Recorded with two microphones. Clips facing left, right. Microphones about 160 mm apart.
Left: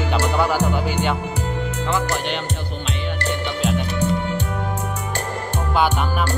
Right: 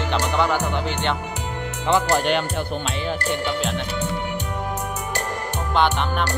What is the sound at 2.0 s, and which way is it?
Music, 55° right (ahead or behind).